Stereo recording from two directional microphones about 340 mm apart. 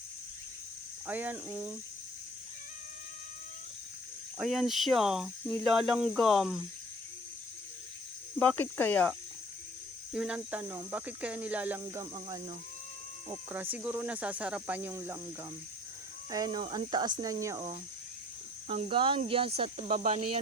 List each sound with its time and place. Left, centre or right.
1.0 s speech: centre
4.4 s speech: centre
8.4 s speech: centre
10.2 s speech: centre
16.3 s speech: centre